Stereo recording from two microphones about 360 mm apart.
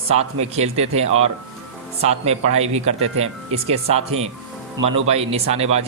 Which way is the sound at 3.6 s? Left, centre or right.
Centre.